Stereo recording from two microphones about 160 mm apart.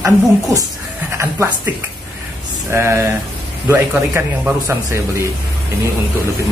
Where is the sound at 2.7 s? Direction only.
15° right (ahead or behind).